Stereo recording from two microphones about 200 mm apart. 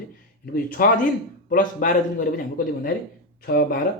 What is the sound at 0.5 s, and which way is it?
Speech, 45° left (ahead or behind).